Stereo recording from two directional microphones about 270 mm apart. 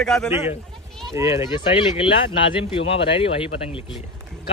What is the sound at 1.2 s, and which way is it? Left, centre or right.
Speech, centre.